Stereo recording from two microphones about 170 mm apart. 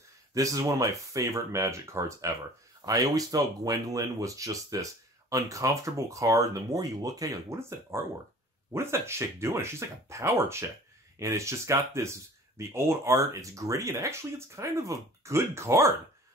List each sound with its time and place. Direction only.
0.3 s speech: 20° right (ahead or behind)